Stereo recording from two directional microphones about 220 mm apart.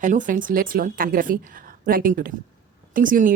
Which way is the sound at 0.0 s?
35° right (ahead or behind).